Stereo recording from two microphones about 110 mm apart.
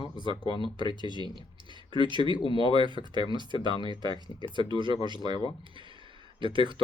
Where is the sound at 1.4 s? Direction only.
45° left (ahead or behind).